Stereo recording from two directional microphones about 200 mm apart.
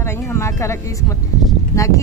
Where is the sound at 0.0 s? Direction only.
10° left (ahead or behind).